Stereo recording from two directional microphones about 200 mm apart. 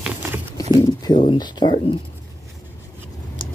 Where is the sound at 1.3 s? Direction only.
20° left (ahead or behind).